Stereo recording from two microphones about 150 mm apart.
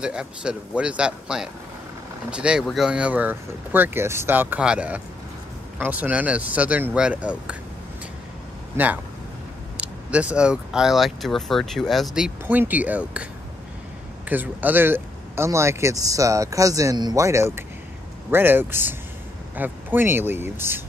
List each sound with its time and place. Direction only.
0.0 s speech: 5° right (ahead or behind)
8.7 s speech: 10° right (ahead or behind)
14.3 s speech: 10° right (ahead or behind)